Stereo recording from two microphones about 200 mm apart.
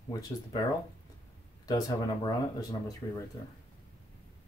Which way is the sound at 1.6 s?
20° left (ahead or behind).